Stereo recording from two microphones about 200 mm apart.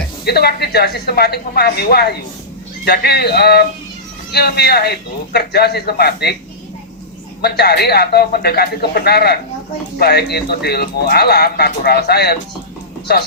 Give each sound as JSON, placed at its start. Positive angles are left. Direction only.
{"t": 0.3, "sound": "speech", "side_deg": 55}
{"t": 7.4, "sound": "speech", "side_deg": 55}